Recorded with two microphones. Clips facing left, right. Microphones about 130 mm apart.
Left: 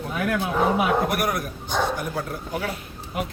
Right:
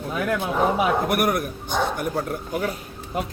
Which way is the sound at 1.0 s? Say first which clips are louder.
Right 3 dB; 55° right (ahead or behind).